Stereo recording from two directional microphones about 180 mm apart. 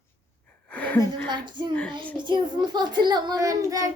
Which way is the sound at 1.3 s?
25° right (ahead or behind).